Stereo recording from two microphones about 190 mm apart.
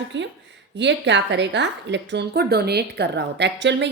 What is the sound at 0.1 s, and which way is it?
A woman's voice, 70° right (ahead or behind).